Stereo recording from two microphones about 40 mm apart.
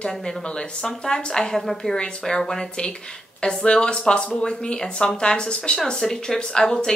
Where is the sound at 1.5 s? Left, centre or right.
Centre.